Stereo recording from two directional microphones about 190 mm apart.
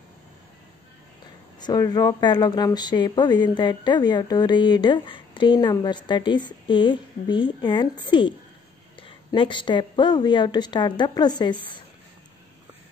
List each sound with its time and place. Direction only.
1.6 s speech: 20° left (ahead or behind)